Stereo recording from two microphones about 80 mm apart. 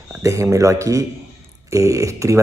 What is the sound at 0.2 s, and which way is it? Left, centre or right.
Speech, right.